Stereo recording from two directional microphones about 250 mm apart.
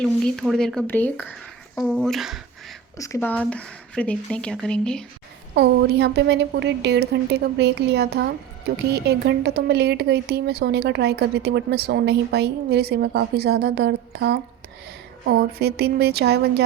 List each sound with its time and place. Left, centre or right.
0.0 s speech: centre
3.0 s speech: centre
5.5 s a woman's voice: right